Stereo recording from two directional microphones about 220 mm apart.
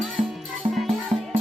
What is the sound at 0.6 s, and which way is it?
Music, 25° right (ahead or behind).